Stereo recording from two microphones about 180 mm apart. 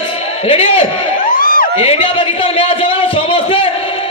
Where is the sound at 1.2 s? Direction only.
50° left (ahead or behind).